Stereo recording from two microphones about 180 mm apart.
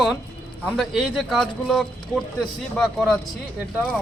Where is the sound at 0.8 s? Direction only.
Centre (ahead or behind).